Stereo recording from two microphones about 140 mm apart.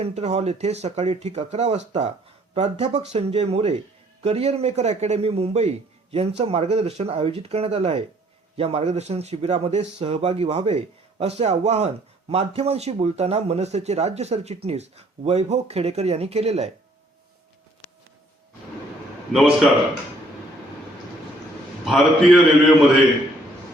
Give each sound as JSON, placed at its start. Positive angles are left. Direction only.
{"t": 0.0, "sound": "speech", "side_deg": -50}
{"t": 19.3, "sound": "a man's voice", "side_deg": -5}
{"t": 21.8, "sound": "a man's voice", "side_deg": 0}